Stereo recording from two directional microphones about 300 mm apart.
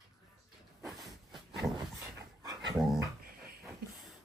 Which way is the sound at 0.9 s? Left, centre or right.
Centre.